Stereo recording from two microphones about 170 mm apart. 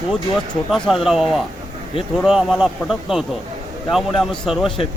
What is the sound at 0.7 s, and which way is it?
Speech, centre (ahead or behind).